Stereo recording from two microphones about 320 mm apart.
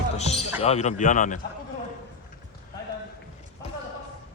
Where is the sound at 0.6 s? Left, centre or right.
Centre.